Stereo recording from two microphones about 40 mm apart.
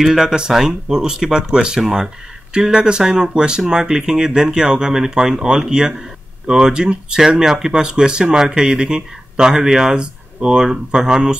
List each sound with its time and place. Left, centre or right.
0.0 s speech: centre